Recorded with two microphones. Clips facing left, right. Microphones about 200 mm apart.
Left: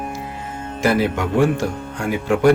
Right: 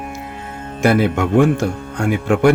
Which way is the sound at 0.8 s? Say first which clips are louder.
Right 3 dB; 50° right (ahead or behind).